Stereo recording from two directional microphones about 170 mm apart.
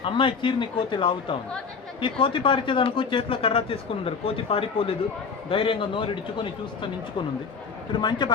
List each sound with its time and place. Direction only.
0.0 s speech: 30° left (ahead or behind)
7.9 s speech: 25° left (ahead or behind)